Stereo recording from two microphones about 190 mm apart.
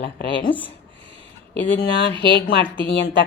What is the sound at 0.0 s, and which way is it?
Speech, 60° left (ahead or behind).